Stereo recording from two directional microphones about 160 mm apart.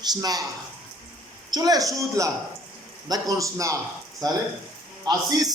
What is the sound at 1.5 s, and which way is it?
A man's voice, 25° right (ahead or behind).